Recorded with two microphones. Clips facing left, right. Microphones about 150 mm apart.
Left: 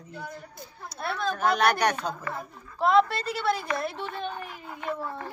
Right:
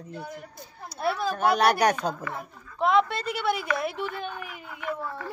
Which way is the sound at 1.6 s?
35° right (ahead or behind).